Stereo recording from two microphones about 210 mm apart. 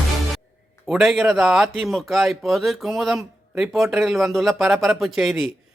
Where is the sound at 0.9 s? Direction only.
Centre (ahead or behind).